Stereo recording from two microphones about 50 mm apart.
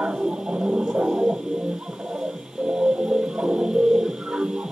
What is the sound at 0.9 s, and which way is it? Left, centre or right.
Guitar, right.